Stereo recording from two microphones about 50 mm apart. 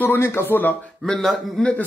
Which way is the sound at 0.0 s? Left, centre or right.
Left.